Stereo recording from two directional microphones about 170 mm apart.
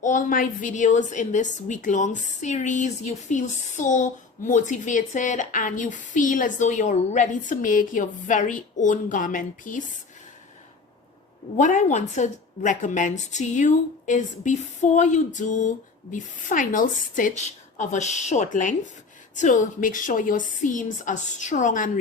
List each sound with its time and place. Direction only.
0.0 s a woman's voice: 50° left (ahead or behind)
11.5 s speech: 45° left (ahead or behind)